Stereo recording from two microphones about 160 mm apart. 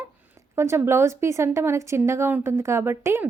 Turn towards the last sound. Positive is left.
turn(degrees=-15)  # may be behind; listen again after turning